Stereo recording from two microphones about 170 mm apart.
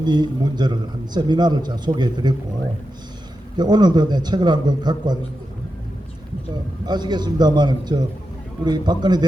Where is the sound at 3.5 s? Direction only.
25° right (ahead or behind).